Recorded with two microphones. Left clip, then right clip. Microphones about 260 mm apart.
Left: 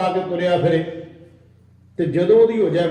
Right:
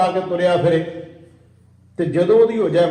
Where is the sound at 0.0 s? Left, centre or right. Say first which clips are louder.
Right 3 dB; right.